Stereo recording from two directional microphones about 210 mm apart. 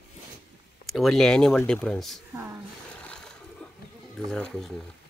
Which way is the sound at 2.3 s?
10° right (ahead or behind).